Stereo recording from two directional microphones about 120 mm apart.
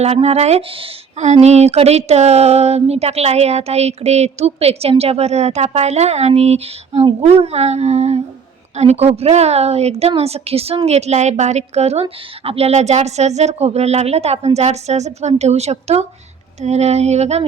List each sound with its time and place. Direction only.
0.0 s a woman's voice: 60° right (ahead or behind)
1.2 s a woman's voice: 65° right (ahead or behind)
16.6 s a sound: 65° right (ahead or behind)